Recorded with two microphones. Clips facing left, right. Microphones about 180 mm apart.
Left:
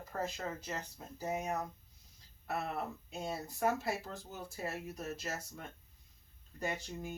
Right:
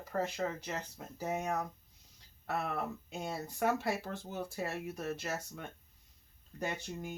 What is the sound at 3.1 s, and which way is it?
Speech, 75° right (ahead or behind).